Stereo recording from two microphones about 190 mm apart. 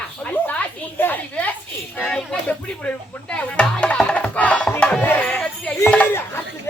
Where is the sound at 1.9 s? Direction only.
5° left (ahead or behind).